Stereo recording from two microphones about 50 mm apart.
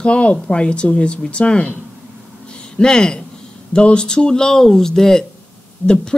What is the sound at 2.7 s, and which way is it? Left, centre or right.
Speech, centre.